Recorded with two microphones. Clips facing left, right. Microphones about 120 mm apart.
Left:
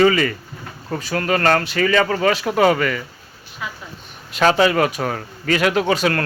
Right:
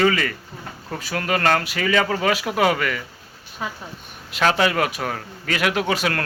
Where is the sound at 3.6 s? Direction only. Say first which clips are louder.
Right 1 dB; 35° right (ahead or behind).